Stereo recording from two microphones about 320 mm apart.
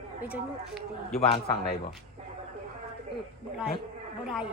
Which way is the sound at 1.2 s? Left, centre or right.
Left.